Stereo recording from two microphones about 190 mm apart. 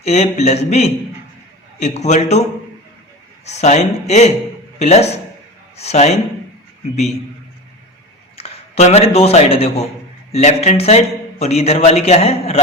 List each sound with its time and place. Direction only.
0.0 s a man's voice: 35° left (ahead or behind)
3.4 s a man's voice: 35° left (ahead or behind)
8.4 s a man's voice: 30° left (ahead or behind)